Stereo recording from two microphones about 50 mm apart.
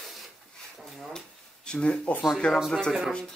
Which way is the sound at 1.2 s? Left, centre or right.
Centre.